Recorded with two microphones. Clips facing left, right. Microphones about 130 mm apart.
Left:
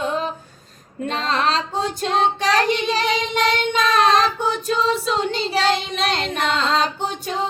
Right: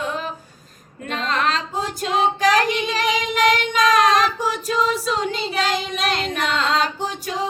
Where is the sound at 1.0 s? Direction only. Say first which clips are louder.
Left 1 dB; 35° left (ahead or behind).